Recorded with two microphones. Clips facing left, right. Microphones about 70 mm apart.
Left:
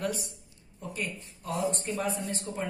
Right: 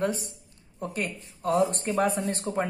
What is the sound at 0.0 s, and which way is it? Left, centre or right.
Speech, right.